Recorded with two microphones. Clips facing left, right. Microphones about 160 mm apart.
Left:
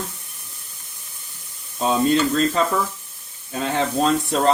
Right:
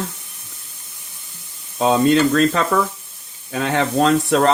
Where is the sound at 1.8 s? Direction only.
90° right.